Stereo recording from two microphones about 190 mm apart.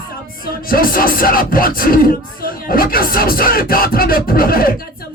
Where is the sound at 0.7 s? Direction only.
50° left (ahead or behind).